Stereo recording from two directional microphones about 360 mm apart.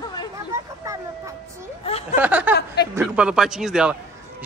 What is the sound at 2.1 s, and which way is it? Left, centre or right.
Speech, centre.